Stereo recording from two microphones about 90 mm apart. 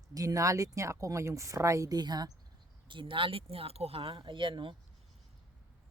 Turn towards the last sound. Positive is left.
turn(degrees=-65)  # may be behind; listen again after turning